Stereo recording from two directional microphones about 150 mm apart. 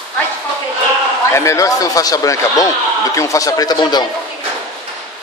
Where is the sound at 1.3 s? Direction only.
20° left (ahead or behind).